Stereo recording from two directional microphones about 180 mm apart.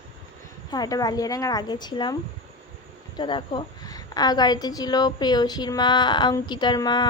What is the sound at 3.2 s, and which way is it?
A woman's voice, 25° left (ahead or behind).